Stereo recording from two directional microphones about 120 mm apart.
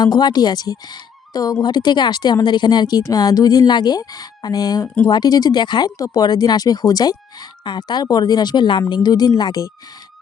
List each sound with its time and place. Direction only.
0.0 s a woman's voice: 35° left (ahead or behind)